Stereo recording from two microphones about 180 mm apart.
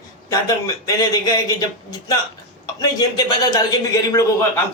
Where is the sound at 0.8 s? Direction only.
20° left (ahead or behind).